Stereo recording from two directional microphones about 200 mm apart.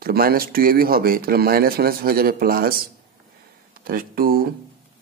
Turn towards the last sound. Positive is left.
turn(degrees=-45)  # may be behind; listen again after turning